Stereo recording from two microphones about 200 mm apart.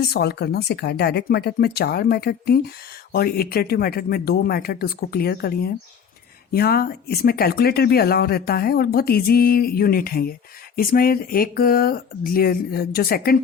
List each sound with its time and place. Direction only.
0.0 s speech: 55° left (ahead or behind)